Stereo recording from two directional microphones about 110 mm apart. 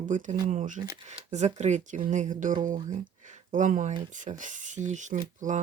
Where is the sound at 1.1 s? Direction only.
90° right.